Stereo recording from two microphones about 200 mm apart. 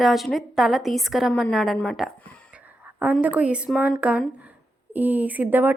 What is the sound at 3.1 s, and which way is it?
A woman's voice, 5° right (ahead or behind).